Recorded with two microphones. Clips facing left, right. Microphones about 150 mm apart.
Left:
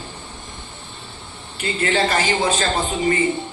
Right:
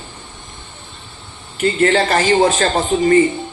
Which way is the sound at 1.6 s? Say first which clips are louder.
Right 6 dB; 50° right (ahead or behind).